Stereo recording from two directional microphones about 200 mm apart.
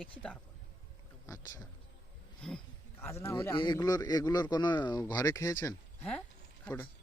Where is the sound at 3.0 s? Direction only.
15° left (ahead or behind).